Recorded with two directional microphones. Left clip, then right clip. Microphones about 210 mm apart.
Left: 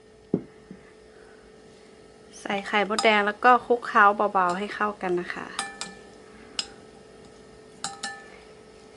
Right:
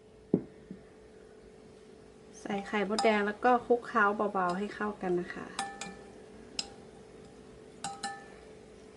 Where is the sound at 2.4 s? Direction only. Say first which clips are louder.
Left 8 dB; 15° right (ahead or behind).